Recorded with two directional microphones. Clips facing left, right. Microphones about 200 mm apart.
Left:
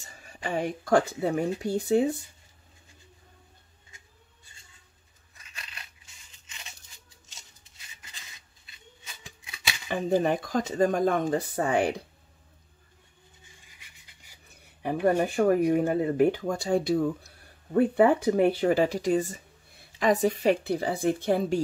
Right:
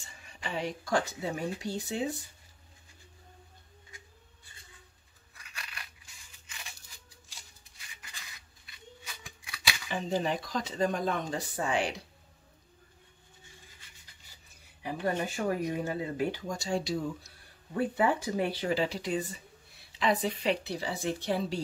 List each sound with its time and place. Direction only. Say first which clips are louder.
0.0 s speech: left 6 dB; 40° left (ahead or behind); by 2.0 s 60° left (ahead or behind)
5.3 s a sound: right 1 dB; 20° left (ahead or behind)
9.8 s speech: left 7 dB; 55° left (ahead or behind)
14.5 s speech: left 7 dB; 55° left (ahead or behind)